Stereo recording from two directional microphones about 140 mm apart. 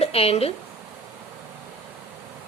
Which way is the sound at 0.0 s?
45° left (ahead or behind).